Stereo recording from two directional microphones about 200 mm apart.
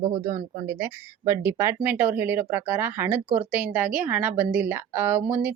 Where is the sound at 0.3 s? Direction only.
15° right (ahead or behind).